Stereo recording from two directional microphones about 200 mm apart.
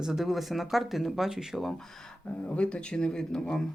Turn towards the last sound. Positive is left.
turn(degrees=5)  # may be behind; listen again after turning